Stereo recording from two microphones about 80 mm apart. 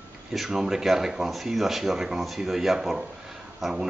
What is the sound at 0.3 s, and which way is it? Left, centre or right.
Speech, centre.